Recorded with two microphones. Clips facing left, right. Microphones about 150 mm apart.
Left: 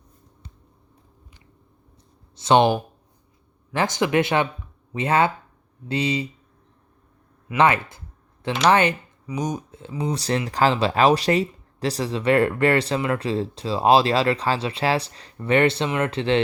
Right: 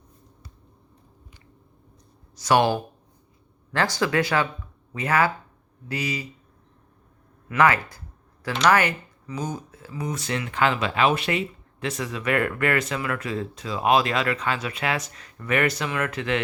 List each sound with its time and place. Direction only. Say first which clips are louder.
2.3 s speech: left 3 dB; 25° left (ahead or behind)
7.4 s speech: left 1 dB; 25° left (ahead or behind)